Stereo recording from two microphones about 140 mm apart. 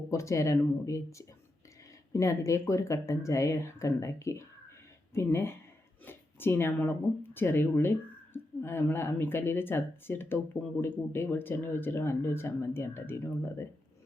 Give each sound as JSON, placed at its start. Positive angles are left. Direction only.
{"t": 0.1, "sound": "speech", "side_deg": 20}